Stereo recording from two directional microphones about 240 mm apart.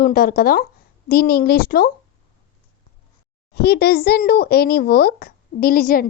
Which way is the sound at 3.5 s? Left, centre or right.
Left.